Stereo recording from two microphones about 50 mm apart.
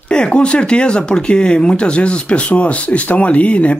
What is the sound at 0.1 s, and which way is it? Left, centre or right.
Speech, left.